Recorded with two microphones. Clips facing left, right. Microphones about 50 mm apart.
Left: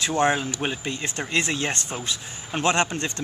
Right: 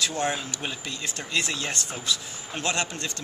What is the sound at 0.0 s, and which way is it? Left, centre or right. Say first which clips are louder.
Speech: left 6 dB; left.